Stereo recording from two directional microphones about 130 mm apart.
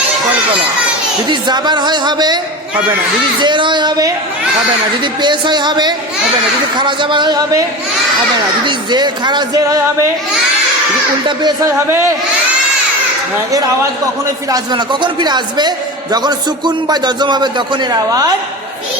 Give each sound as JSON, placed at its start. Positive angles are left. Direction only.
{"t": 1.3, "sound": "a man's voice", "side_deg": -35}
{"t": 3.4, "sound": "a man's voice", "side_deg": -35}
{"t": 5.2, "sound": "a man's voice", "side_deg": -35}
{"t": 11.3, "sound": "a man's voice", "side_deg": -35}
{"t": 11.9, "sound": "speech", "side_deg": -20}
{"t": 14.5, "sound": "a man's voice", "side_deg": -35}